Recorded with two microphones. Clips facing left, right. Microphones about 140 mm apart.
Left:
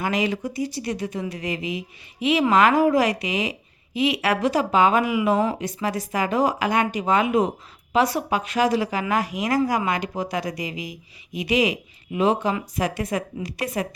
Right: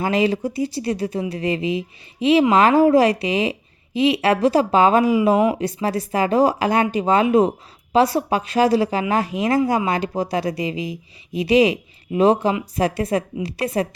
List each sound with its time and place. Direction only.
0.0 s speech: 30° right (ahead or behind)